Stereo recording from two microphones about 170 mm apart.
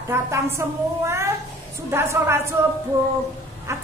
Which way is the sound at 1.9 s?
15° right (ahead or behind).